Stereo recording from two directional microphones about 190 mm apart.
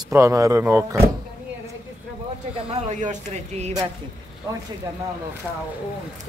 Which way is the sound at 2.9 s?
40° right (ahead or behind).